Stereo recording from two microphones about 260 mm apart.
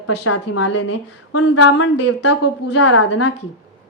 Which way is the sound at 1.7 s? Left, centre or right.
Left.